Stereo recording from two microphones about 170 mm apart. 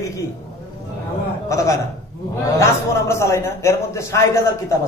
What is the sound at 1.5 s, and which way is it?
Speech, 15° left (ahead or behind).